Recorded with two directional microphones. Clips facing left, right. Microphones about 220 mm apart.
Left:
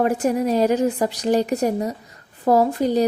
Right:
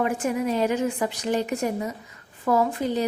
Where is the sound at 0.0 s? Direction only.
40° left (ahead or behind).